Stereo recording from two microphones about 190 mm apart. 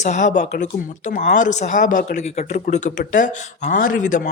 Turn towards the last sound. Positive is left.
turn(degrees=45)  # may be behind; listen again after turning